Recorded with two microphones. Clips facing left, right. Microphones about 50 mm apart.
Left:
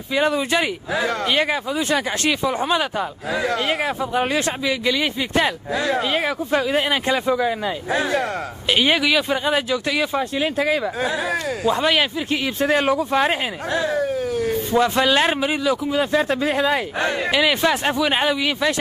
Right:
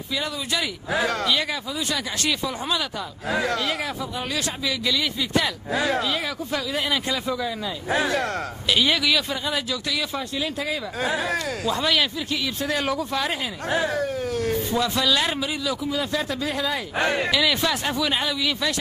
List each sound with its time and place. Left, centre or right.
0.1 s speech: left
3.3 s speech: centre
3.5 s speech: left
11.0 s speech: centre
11.6 s speech: left
13.8 s speech: centre
14.7 s speech: left